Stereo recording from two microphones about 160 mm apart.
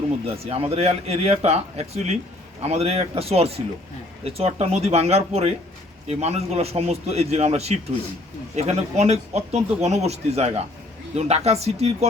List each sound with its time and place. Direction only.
0.3 s speech: 40° right (ahead or behind)